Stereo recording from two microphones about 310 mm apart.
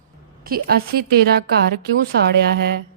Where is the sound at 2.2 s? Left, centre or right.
Right.